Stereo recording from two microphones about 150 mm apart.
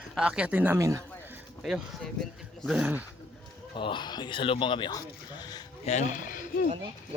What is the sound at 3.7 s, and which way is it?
Speech, 35° left (ahead or behind).